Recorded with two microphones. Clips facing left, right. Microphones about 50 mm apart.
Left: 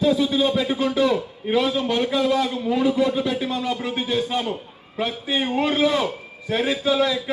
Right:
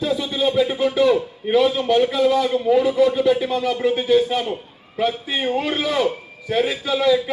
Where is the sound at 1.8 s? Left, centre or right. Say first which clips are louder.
Right 4 dB; right.